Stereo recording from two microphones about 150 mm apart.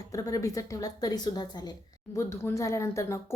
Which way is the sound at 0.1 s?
25° left (ahead or behind).